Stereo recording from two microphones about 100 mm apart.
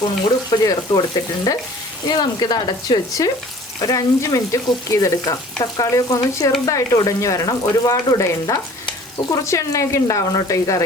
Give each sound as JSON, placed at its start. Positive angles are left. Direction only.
{"t": 0.5, "sound": "speech", "side_deg": 40}